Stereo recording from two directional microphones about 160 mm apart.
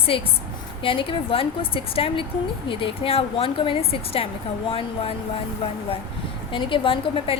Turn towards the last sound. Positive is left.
turn(degrees=35)  # may be behind; listen again after turning